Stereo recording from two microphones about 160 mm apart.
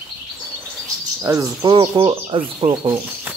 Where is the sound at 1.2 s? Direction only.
20° right (ahead or behind).